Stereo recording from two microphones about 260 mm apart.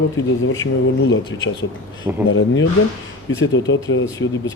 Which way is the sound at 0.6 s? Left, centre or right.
Left.